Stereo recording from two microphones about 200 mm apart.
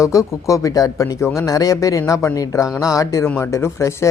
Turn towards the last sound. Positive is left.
turn(degrees=15)  # may be behind; listen again after turning